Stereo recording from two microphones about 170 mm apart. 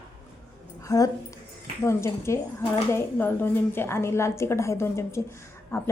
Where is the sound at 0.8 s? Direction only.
20° left (ahead or behind).